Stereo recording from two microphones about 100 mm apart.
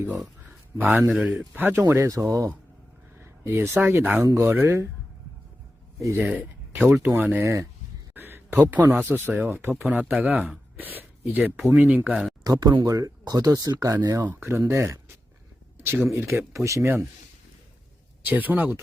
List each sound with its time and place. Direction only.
0.8 s a man's voice: 20° right (ahead or behind)
1.9 s speech: 30° right (ahead or behind)
4.2 s speech: 30° right (ahead or behind)
6.0 s speech: 30° right (ahead or behind)
6.2 s speech: 10° right (ahead or behind)
7.3 s a man's voice: 30° right (ahead or behind)
12.4 s speech: 40° right (ahead or behind)
14.3 s speech: 20° right (ahead or behind)
18.3 s a man's voice: 15° right (ahead or behind)